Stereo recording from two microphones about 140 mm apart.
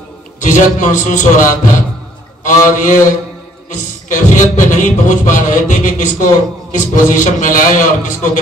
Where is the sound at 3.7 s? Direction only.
60° left (ahead or behind).